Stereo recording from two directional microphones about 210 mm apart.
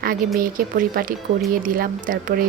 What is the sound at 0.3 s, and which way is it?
Speech, 40° right (ahead or behind).